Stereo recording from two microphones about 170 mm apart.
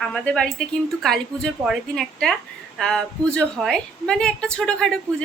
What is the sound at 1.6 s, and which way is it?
A woman's voice, centre (ahead or behind).